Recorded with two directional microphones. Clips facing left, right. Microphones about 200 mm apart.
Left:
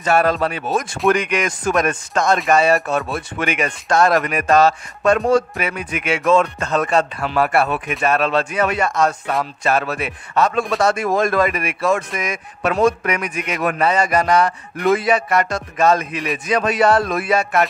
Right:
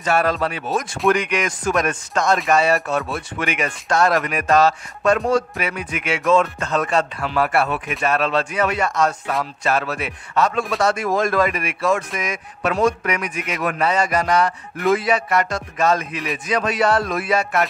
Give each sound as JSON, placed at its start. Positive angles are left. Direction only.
{"t": 0.0, "sound": "music", "side_deg": 50}